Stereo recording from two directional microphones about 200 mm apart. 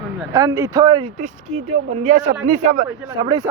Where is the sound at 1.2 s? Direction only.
35° right (ahead or behind).